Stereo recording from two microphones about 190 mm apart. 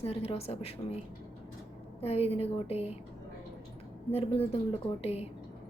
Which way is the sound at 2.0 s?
30° left (ahead or behind).